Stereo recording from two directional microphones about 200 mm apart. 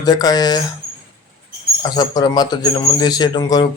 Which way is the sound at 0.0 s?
20° left (ahead or behind).